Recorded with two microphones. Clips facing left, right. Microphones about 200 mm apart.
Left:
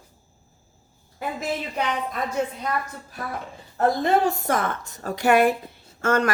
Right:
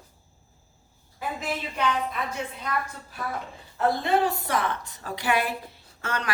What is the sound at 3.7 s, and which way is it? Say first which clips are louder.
A woman's voice: left 3 dB; 45° left (ahead or behind).